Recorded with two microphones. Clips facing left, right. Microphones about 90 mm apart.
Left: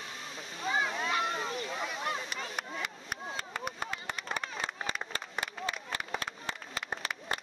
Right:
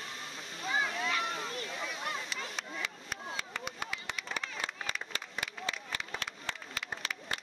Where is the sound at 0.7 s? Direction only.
45° left (ahead or behind).